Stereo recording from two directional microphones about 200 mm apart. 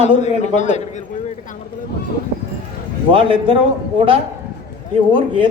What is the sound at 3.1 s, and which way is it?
Speech, 25° right (ahead or behind).